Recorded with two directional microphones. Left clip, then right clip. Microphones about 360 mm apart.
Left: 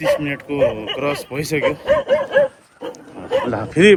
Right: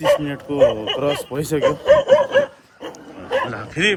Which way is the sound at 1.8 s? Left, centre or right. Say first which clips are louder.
Right 6 dB; centre.